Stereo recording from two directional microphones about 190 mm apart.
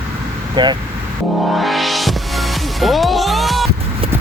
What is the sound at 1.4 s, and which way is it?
Music, centre (ahead or behind).